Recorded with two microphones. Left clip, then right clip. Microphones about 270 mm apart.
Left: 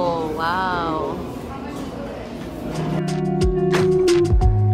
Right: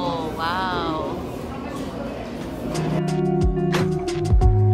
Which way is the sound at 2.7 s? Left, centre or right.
Centre.